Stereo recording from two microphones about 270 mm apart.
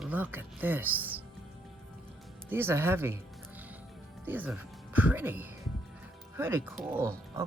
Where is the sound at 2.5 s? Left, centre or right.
Centre.